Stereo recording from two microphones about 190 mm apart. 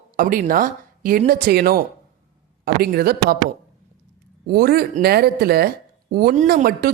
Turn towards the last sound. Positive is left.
turn(degrees=-50)  # may be behind; listen again after turning